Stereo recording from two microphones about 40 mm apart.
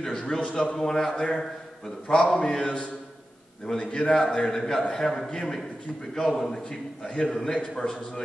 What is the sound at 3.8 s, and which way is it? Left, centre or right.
A man's voice, left.